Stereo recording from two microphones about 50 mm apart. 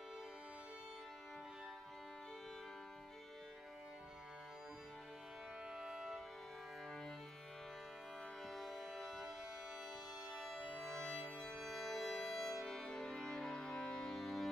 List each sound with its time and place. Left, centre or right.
5.7 s music: centre
8.5 s music: centre
10.3 s music: centre
12.9 s music: centre
14.2 s music: centre